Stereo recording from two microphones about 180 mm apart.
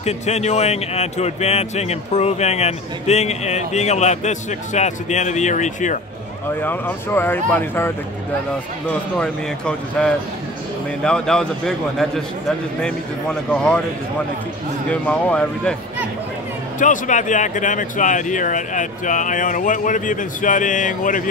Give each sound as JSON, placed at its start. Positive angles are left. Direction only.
{"t": 0.0, "sound": "speech", "side_deg": 35}
{"t": 6.6, "sound": "a man's voice", "side_deg": 10}
{"t": 14.9, "sound": "speech", "side_deg": 5}
{"t": 16.8, "sound": "speech", "side_deg": 45}